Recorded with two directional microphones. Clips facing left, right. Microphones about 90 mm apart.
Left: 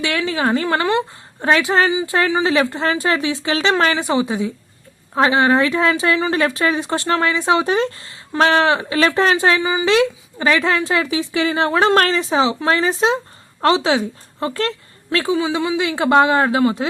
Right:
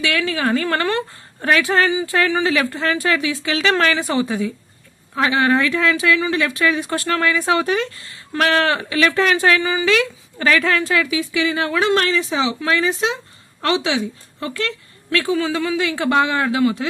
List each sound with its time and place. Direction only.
0.2 s a woman's voice: 25° left (ahead or behind)
5.1 s a woman's voice: 30° left (ahead or behind)
11.0 s a woman's voice: 35° left (ahead or behind)
15.4 s a woman's voice: 20° left (ahead or behind)